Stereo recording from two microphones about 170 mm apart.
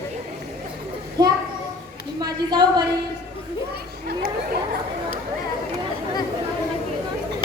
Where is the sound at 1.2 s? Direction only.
25° right (ahead or behind).